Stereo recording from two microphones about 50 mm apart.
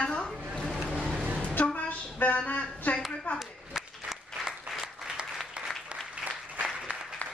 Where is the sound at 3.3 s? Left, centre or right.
Centre.